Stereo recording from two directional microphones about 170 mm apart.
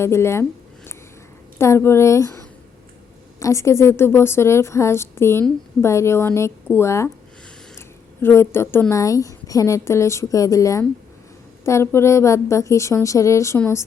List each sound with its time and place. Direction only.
0.0 s a woman's voice: 15° left (ahead or behind)
1.5 s a woman's voice: 15° left (ahead or behind)
3.4 s a woman's voice: 15° left (ahead or behind)